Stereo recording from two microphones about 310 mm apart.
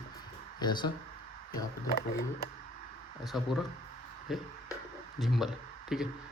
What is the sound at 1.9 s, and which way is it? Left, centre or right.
Speech, left.